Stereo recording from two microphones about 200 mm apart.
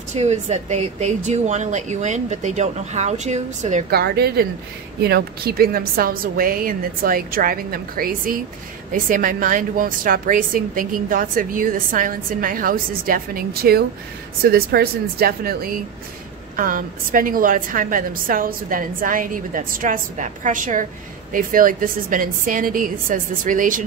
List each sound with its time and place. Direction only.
0.1 s speech: 35° right (ahead or behind)
3.9 s a woman's voice: 55° right (ahead or behind)